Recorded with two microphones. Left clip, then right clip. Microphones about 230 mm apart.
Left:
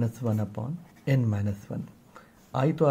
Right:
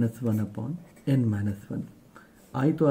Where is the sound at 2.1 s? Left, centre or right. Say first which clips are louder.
Left 4 dB; left.